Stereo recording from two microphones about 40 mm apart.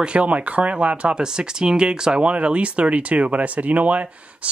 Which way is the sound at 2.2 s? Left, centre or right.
Right.